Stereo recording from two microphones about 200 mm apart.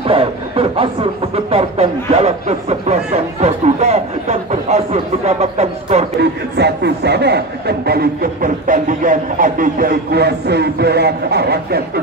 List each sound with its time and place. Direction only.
0.0 s speech: 30° right (ahead or behind)
6.5 s speech: 55° right (ahead or behind)